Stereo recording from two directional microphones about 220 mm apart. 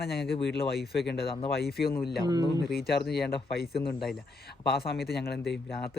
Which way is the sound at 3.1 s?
45° left (ahead or behind).